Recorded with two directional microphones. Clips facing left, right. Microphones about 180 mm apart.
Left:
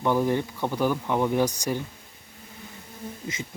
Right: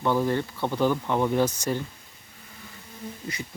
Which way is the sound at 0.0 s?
15° left (ahead or behind).